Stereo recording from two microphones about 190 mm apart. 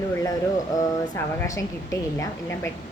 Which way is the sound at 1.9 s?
15° left (ahead or behind).